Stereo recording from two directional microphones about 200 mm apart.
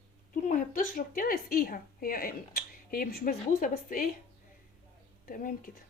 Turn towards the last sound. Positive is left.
turn(degrees=40)  # may be behind; listen again after turning